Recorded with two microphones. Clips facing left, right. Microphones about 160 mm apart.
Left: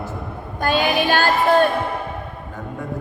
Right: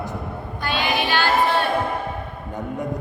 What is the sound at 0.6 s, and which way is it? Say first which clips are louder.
Child singing: left 5 dB; 45° left (ahead or behind).